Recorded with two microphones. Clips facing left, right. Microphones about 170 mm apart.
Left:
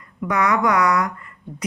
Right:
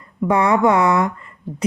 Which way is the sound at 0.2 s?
30° right (ahead or behind).